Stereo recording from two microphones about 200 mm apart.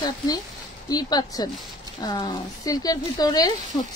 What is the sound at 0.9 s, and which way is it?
A woman's voice, 20° left (ahead or behind).